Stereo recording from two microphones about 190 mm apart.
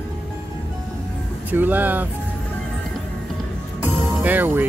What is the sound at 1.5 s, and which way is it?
Speech, 10° right (ahead or behind).